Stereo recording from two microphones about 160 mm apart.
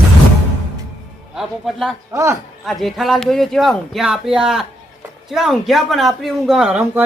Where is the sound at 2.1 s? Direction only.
20° right (ahead or behind).